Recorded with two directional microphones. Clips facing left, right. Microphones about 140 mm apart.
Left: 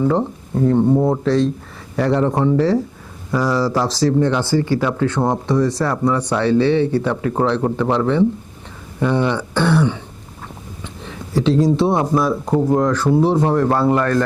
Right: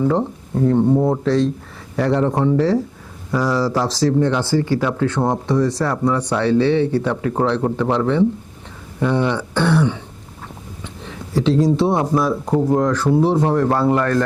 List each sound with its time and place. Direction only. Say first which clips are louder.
0.0 s speech: left 1 dB; 25° left (ahead or behind)
3.8 s speech: left 1 dB; 15° left (ahead or behind)
11.9 s speech: left 1 dB; 25° left (ahead or behind)